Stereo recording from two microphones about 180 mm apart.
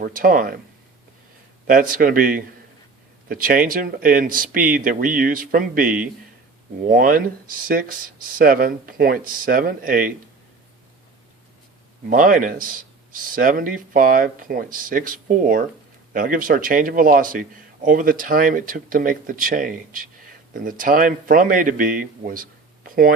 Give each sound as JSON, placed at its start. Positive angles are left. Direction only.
{"t": 0.0, "sound": "speech", "side_deg": -50}
{"t": 1.6, "sound": "speech", "side_deg": -50}
{"t": 12.0, "sound": "speech", "side_deg": -50}